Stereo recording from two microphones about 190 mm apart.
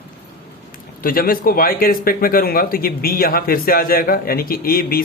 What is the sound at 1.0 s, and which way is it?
Speech, 50° left (ahead or behind).